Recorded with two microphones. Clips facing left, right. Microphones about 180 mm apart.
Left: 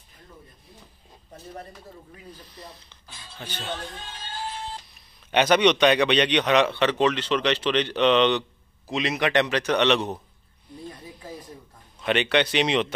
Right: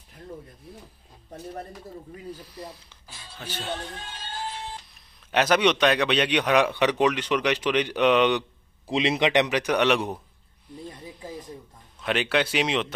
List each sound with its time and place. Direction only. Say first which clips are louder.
2.4 s speech: right 4 dB; 10° right (ahead or behind)
5.3 s a man's voice: left 2 dB; centre (ahead or behind)
8.8 s a man's voice: right 2 dB; 30° right (ahead or behind); by 10.1 s 10° right (ahead or behind)
12.0 s speech: left 2 dB; centre (ahead or behind)